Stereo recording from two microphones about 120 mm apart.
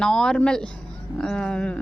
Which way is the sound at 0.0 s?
5° left (ahead or behind).